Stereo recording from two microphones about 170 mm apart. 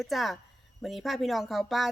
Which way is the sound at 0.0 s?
Centre (ahead or behind).